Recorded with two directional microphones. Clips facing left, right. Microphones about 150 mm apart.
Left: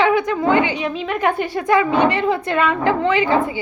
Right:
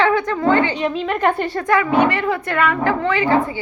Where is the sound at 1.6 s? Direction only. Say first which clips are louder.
Left 2 dB; 15° left (ahead or behind).